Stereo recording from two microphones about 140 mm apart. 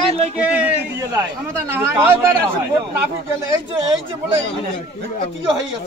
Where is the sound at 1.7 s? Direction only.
15° right (ahead or behind).